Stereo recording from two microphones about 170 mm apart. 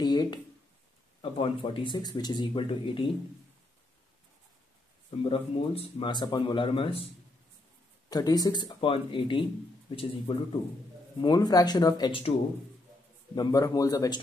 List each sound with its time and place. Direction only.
0.0 s speech: 25° left (ahead or behind)
5.3 s speech: 30° left (ahead or behind)
8.1 s speech: 20° left (ahead or behind)
13.3 s speech: 20° left (ahead or behind)